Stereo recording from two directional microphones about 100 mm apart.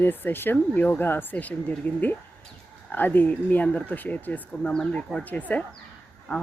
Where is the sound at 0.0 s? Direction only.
20° left (ahead or behind).